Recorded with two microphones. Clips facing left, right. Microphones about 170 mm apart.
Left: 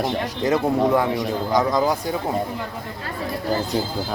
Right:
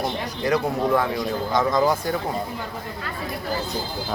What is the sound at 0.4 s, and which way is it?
Speech, 20° left (ahead or behind).